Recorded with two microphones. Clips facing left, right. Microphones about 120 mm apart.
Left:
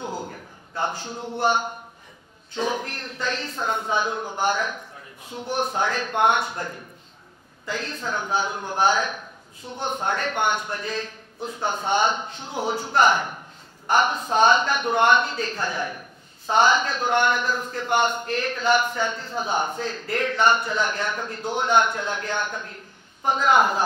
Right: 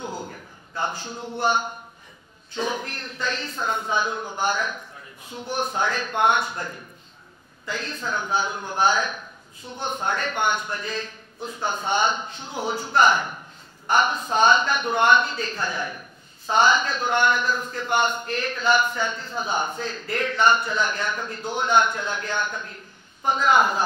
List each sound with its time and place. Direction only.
0.3 s a sound: 40° left (ahead or behind)
1.4 s a man's voice: 60° left (ahead or behind)
6.5 s a man's voice: 40° left (ahead or behind)
7.6 s a man's voice: 50° left (ahead or behind)
22.5 s a man's voice: 40° left (ahead or behind)
23.2 s a man's voice: 55° left (ahead or behind)